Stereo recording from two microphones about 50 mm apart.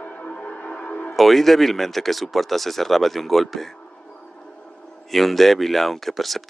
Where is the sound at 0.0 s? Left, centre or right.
Left.